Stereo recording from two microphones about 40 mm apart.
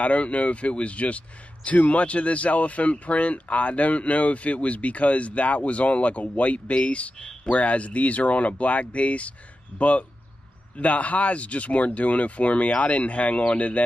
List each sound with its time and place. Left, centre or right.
0.0 s speech: left
7.2 s speech: centre
7.5 s speech: left